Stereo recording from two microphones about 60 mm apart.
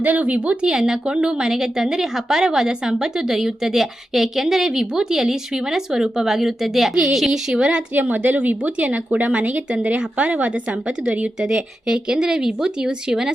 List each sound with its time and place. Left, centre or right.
0.0 s a woman's voice: right
7.9 s a woman's voice: right; by 13.3 s centre